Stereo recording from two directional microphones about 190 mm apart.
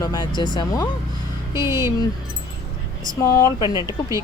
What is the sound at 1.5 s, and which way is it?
Speech, 15° right (ahead or behind).